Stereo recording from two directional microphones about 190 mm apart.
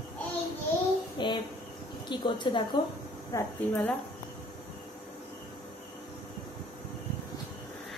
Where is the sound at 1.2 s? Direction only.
25° left (ahead or behind).